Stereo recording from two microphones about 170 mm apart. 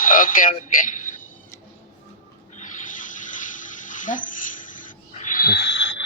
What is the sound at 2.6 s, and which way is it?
Water tap, 50° left (ahead or behind).